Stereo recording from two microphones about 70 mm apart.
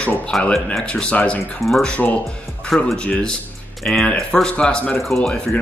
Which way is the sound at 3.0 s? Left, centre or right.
Centre.